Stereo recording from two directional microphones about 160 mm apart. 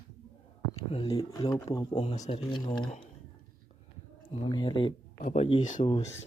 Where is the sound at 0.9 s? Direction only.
35° left (ahead or behind).